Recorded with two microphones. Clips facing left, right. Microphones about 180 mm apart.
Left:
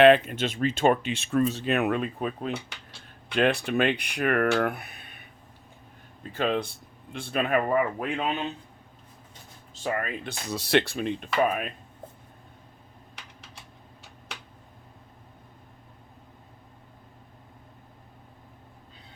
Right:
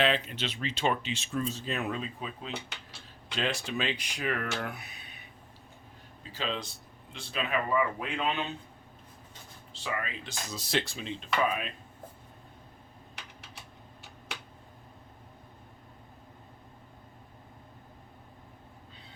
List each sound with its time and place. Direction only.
0.0 s speech: 55° left (ahead or behind)
6.3 s speech: 55° left (ahead or behind)
9.8 s speech: 50° left (ahead or behind)